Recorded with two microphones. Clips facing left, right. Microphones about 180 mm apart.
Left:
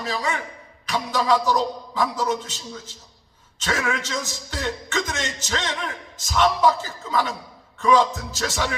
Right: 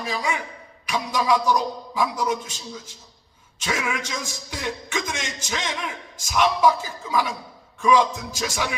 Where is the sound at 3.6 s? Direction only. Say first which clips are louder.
Left 2 dB; 10° right (ahead or behind).